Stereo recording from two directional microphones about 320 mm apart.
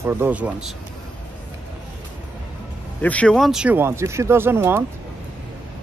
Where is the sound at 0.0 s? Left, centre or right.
Centre.